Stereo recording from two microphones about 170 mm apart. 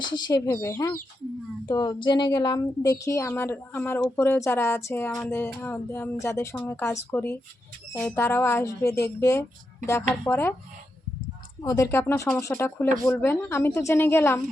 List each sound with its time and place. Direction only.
0.0 s speech: 25° left (ahead or behind)
11.6 s speech: 20° left (ahead or behind)